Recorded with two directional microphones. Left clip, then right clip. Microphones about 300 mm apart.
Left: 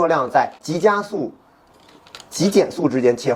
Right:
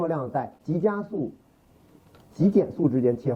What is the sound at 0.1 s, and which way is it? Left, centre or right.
Speech, centre.